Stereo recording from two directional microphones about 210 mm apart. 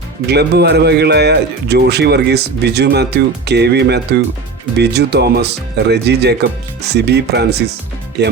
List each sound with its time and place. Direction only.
0.3 s a man's voice: 50° right (ahead or behind)